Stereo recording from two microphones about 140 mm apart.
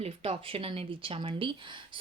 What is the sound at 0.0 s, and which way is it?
Speech, 40° right (ahead or behind).